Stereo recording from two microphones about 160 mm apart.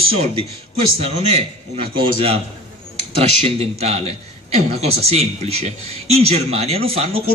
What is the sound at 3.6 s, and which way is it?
A man's voice, 40° right (ahead or behind).